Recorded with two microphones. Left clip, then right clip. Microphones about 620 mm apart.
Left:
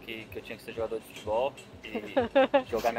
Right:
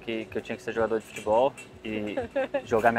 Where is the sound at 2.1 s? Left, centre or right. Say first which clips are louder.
Left 7 dB; left.